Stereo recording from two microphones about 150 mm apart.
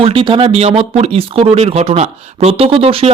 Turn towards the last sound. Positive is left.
turn(degrees=-40)  # may be behind; listen again after turning